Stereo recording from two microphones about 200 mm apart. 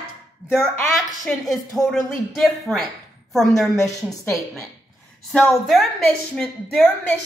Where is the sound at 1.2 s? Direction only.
Centre (ahead or behind).